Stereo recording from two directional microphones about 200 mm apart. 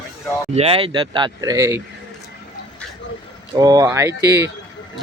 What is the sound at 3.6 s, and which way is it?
Speech, 20° right (ahead or behind).